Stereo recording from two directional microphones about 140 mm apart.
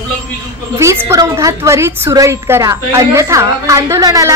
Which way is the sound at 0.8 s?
20° right (ahead or behind).